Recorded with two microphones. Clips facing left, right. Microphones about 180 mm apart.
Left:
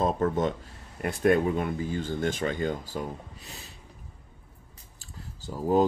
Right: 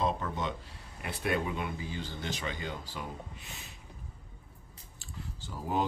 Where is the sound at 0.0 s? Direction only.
50° left (ahead or behind).